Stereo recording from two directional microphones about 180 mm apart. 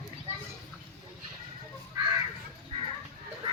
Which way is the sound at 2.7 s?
30° right (ahead or behind).